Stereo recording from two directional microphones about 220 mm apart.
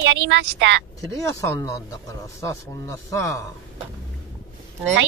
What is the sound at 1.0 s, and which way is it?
Speech, 15° left (ahead or behind).